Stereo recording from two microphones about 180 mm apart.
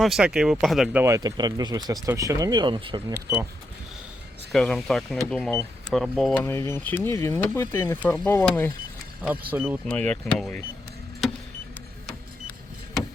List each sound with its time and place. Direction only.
0.0 s speech: centre (ahead or behind)
1.0 s speech: 20° right (ahead or behind)
4.5 s speech: centre (ahead or behind)
6.4 s speech: 15° left (ahead or behind)
9.5 s speech: 10° right (ahead or behind)
9.9 s speech: 5° left (ahead or behind)